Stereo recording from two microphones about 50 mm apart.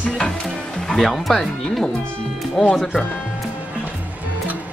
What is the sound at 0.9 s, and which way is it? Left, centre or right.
Speech, centre.